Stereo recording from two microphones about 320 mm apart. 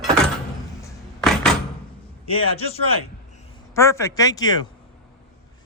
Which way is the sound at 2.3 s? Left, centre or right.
Centre.